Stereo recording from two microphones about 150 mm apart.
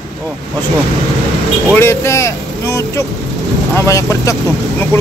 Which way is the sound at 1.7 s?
15° left (ahead or behind).